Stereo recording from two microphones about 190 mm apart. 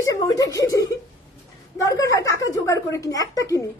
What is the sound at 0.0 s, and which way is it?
Speech, 20° left (ahead or behind).